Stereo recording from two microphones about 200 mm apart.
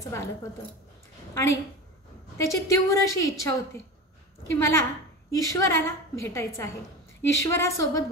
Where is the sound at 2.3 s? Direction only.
15° left (ahead or behind).